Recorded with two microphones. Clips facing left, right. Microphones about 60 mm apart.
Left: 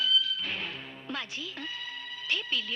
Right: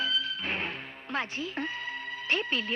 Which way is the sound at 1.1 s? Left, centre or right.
Right.